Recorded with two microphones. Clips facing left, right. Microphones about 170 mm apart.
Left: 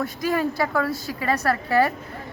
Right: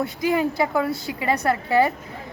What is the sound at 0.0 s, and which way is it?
Speech, 15° right (ahead or behind).